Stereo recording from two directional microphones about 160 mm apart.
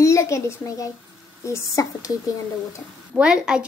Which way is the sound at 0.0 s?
20° left (ahead or behind).